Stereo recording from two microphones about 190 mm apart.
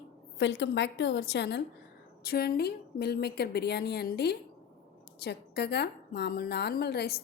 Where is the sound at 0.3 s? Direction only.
70° left (ahead or behind).